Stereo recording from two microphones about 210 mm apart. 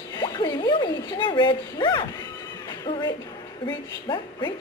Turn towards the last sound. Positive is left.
turn(degrees=20)  # may be behind; listen again after turning